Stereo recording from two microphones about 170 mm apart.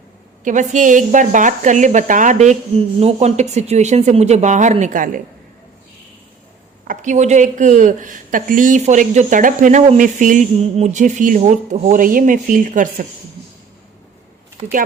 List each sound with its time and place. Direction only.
0.4 s speech: 45° right (ahead or behind)
6.8 s speech: 50° right (ahead or behind)